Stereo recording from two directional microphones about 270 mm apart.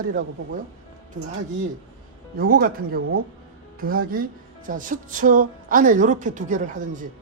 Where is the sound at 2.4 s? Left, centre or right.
Right.